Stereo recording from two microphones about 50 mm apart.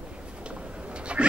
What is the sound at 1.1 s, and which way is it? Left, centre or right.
Pig, right.